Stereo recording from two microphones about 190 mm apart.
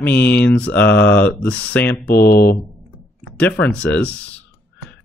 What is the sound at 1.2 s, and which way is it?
Speech, 10° left (ahead or behind).